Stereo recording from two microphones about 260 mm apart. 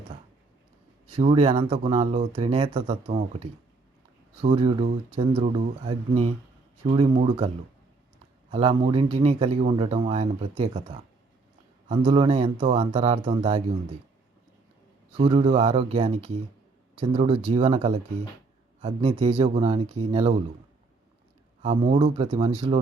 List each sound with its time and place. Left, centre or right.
1.1 s speech: right
4.5 s speech: centre
15.2 s speech: centre
21.6 s speech: right